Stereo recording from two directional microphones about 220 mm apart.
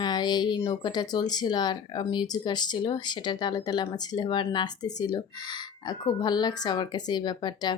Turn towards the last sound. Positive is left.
turn(degrees=20)  # may be behind; listen again after turning